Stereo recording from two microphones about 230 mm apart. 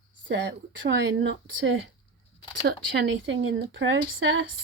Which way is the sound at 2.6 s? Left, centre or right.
Right.